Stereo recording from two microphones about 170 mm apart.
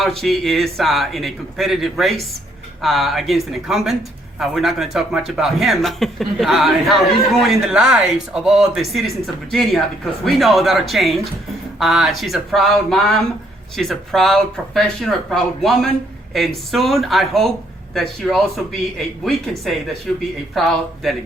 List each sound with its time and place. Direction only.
0.0 s speech: centre (ahead or behind)